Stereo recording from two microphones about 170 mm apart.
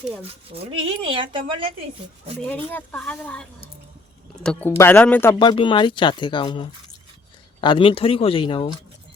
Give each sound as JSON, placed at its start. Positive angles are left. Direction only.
{"t": 0.5, "sound": "speech", "side_deg": -35}
{"t": 2.5, "sound": "speech", "side_deg": 10}
{"t": 5.4, "sound": "speech", "side_deg": 30}